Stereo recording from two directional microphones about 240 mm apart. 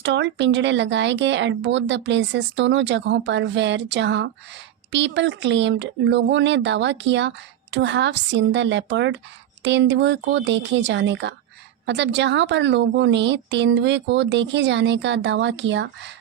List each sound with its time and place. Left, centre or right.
0.0 s speech: right